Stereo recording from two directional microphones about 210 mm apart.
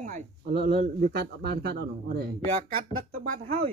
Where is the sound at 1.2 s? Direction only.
50° right (ahead or behind).